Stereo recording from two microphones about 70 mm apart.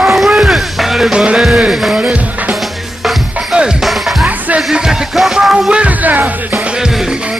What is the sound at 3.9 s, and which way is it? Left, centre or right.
Music, centre.